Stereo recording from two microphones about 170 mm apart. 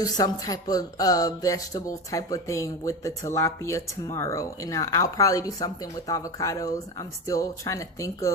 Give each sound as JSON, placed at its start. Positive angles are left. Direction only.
{"t": 0.0, "sound": "speech", "side_deg": 20}